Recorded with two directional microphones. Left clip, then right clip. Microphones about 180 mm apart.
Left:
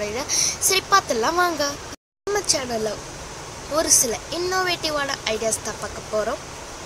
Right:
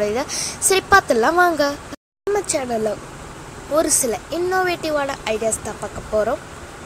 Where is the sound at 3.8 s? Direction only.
25° right (ahead or behind).